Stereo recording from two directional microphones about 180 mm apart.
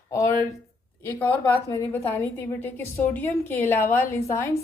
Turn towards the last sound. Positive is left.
turn(degrees=15)  # may be behind; listen again after turning